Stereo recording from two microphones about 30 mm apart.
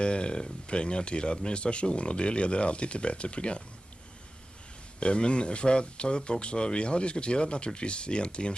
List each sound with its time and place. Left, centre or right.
0.0 s speech: left
5.0 s speech: left